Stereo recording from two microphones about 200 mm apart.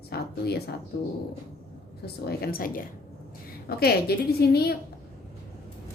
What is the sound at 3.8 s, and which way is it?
Speech, 50° left (ahead or behind).